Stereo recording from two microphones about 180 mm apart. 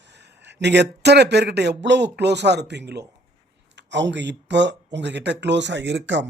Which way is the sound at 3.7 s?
85° right.